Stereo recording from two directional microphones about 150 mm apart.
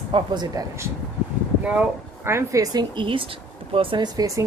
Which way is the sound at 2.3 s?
20° right (ahead or behind).